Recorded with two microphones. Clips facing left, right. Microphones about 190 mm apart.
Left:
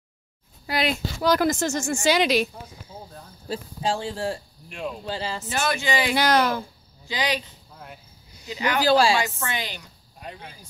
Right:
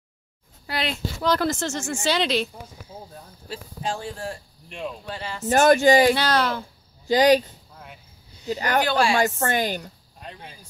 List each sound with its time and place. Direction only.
0.7 s a woman's voice: 10° left (ahead or behind)
3.4 s speech: 30° left (ahead or behind)
5.5 s a woman's voice: 45° right (ahead or behind)
6.1 s a woman's voice: 15° left (ahead or behind)
7.1 s a woman's voice: 45° right (ahead or behind)
8.8 s speech: 35° left (ahead or behind)
9.1 s a woman's voice: 45° right (ahead or behind)